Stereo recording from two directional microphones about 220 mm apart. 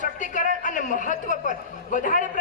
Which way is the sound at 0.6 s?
35° left (ahead or behind).